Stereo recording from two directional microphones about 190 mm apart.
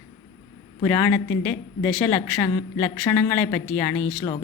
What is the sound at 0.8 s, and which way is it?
A woman's voice, 10° left (ahead or behind).